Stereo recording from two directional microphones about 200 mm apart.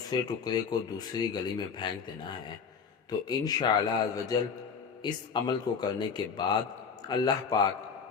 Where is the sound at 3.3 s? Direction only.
20° left (ahead or behind).